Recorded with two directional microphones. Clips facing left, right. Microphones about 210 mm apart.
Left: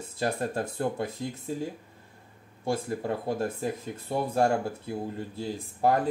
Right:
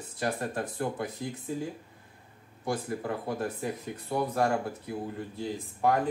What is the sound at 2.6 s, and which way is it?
Speech, 30° left (ahead or behind).